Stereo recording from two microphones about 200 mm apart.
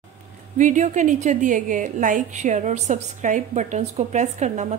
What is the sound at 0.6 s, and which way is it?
A woman's voice, 35° right (ahead or behind).